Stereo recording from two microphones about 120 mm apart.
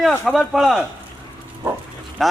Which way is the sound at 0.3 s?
Centre (ahead or behind).